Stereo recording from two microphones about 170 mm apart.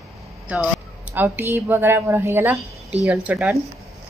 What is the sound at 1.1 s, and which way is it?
Speech, 10° right (ahead or behind).